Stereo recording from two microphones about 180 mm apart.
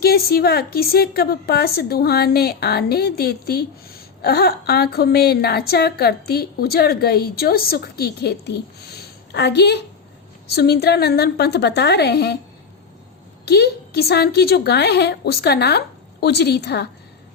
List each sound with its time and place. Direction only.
0.0 s a woman's voice: 60° left (ahead or behind)
13.4 s a woman's voice: 60° left (ahead or behind)